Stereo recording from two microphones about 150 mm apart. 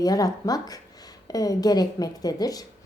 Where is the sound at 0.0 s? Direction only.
25° left (ahead or behind).